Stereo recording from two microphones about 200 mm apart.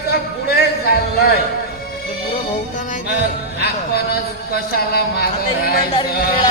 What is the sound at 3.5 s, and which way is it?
Speech, 50° left (ahead or behind).